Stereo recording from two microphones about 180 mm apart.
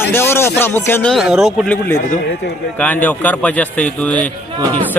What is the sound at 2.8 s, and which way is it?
A man's voice, 10° left (ahead or behind).